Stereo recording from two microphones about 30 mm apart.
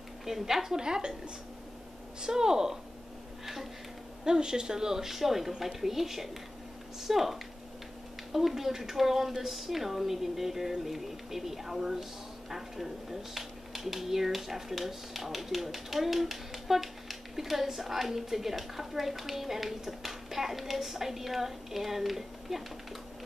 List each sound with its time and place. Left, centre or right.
0.2 s speech: centre
0.7 s a woman's voice: right
2.2 s a woman's voice: right
4.2 s a woman's voice: right; by 22.6 s centre